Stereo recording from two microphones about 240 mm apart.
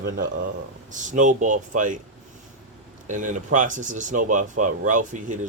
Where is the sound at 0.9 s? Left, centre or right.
Right.